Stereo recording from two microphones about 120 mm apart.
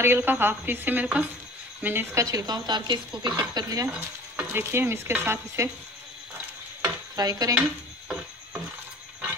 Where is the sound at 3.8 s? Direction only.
20° right (ahead or behind).